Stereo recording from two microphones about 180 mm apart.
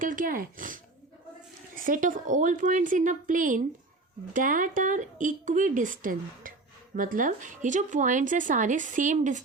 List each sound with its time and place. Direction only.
0.0 s speech: 50° right (ahead or behind)